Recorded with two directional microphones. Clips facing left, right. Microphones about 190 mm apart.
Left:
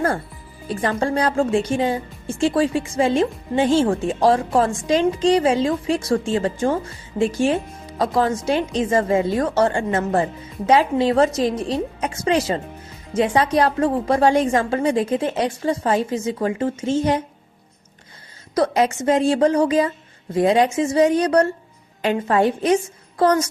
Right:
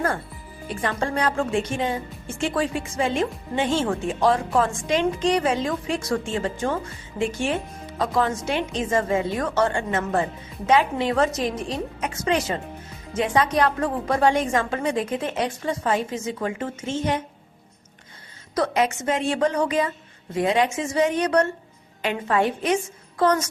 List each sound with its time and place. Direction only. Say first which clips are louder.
0.7 s speech: left 5 dB; 35° left (ahead or behind)
18.5 s a woman's voice: left 4 dB; 35° left (ahead or behind)